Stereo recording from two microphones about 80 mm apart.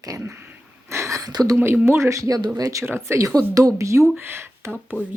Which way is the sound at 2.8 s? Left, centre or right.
Right.